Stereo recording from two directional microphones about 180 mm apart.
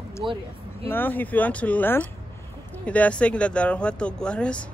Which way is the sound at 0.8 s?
10° left (ahead or behind).